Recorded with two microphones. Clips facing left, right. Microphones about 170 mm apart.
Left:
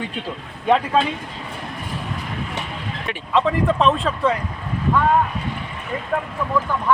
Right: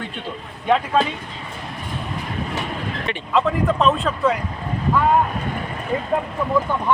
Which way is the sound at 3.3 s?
Centre (ahead or behind).